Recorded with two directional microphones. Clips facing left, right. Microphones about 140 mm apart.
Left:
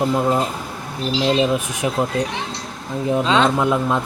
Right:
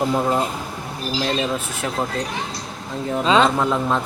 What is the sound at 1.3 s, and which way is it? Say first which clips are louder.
Speech: left 5 dB; 15° left (ahead or behind).